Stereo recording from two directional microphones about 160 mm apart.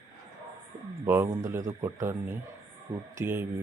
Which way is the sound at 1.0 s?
15° right (ahead or behind).